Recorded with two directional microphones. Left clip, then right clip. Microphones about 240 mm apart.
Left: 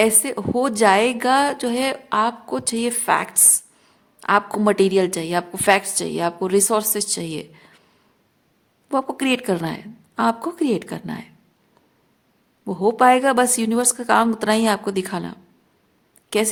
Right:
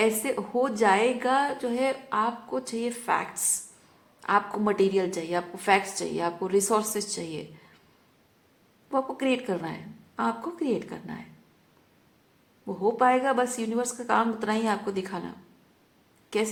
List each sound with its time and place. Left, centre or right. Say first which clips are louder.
0.0 s a woman's voice: left 6 dB; left
8.9 s a woman's voice: left 6 dB; left
12.6 s a woman's voice: left 8 dB; left